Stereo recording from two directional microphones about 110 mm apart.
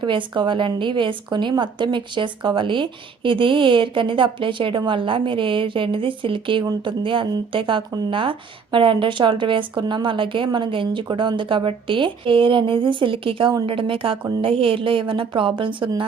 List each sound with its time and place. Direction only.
0.0 s speech: 45° right (ahead or behind)